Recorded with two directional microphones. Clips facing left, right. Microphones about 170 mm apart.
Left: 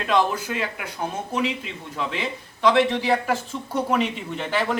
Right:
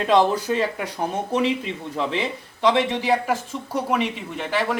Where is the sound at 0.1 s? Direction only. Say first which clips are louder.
Right 3 dB; 35° right (ahead or behind).